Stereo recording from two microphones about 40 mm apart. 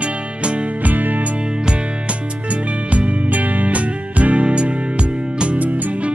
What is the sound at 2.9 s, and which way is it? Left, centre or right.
Music, right.